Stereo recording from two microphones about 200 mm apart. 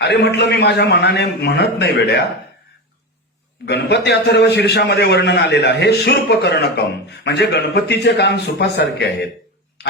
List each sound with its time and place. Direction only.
0.0 s a man's voice: 55° left (ahead or behind)
3.7 s a man's voice: 60° left (ahead or behind)